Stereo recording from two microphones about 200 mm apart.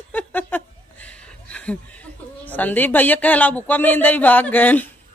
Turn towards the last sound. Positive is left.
turn(degrees=10)  # may be behind; listen again after turning